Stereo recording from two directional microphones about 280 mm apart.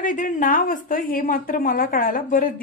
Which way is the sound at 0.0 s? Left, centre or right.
Left.